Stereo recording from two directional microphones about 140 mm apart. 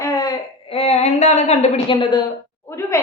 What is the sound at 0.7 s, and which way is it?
A woman's voice, 50° left (ahead or behind).